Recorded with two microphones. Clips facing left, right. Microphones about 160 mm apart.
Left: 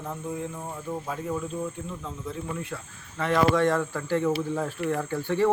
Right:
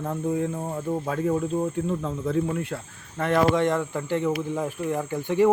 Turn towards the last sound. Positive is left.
turn(degrees=-15)  # may be behind; listen again after turning